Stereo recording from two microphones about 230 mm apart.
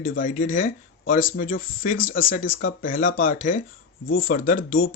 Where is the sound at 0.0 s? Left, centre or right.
Left.